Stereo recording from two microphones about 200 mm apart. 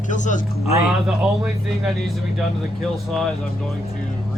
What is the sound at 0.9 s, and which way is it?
Speech, 5° right (ahead or behind).